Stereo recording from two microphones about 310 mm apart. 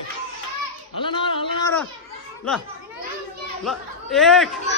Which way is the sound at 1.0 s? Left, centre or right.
Centre.